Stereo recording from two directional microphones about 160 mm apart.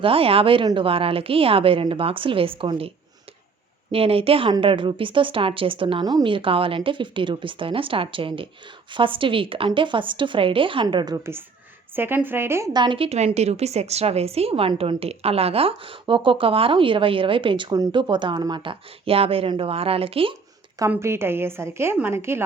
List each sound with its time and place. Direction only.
0.0 s a woman's voice: 35° right (ahead or behind)
3.9 s a woman's voice: 35° right (ahead or behind)
11.9 s a woman's voice: 15° right (ahead or behind); by 20.3 s 35° right (ahead or behind)
20.9 s a woman's voice: 15° right (ahead or behind)